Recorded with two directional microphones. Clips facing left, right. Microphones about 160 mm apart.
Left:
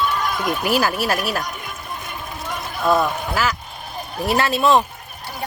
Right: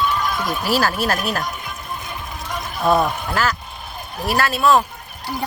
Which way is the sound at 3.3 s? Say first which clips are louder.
Right 2 dB; 10° left (ahead or behind).